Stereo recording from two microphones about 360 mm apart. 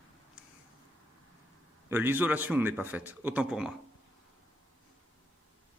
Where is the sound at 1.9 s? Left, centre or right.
Centre.